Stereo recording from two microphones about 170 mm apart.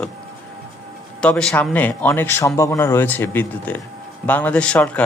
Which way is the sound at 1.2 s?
5° left (ahead or behind).